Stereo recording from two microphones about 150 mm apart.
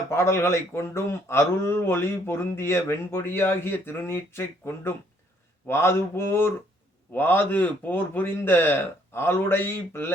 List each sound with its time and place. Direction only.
0.1 s speech: 20° left (ahead or behind)